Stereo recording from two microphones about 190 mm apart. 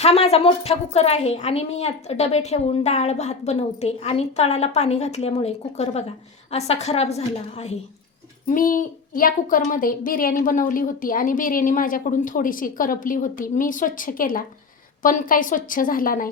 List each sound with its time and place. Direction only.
0.0 s a woman's voice: 35° left (ahead or behind)
8.4 s a woman's voice: 45° left (ahead or behind)